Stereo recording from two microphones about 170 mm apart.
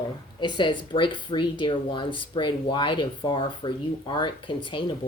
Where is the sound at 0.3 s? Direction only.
25° left (ahead or behind).